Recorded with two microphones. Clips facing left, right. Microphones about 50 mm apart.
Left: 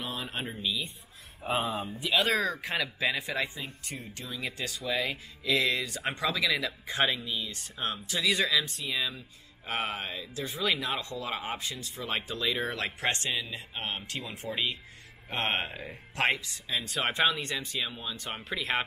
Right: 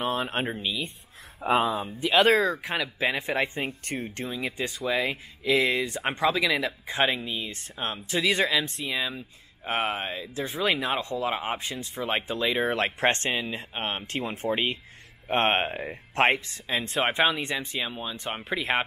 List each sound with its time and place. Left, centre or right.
0.0 s speech: right
1.4 s speech: right
2.0 s speech: right
4.3 s speech: right
8.9 s speech: right